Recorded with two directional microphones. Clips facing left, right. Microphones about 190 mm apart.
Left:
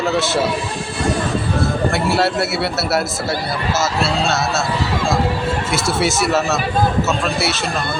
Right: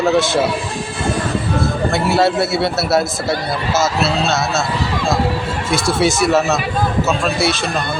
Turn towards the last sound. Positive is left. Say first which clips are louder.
# right 3 dB
turn(degrees=-15)  # may be behind; listen again after turning